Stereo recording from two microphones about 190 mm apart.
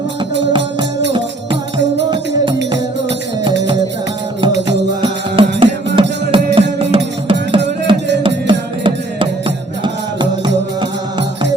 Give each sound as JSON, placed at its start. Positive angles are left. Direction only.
{"t": 2.0, "sound": "music", "side_deg": -25}
{"t": 5.4, "sound": "music", "side_deg": -30}